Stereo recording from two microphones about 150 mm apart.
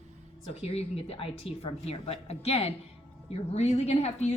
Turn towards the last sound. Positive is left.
turn(degrees=45)  # may be behind; listen again after turning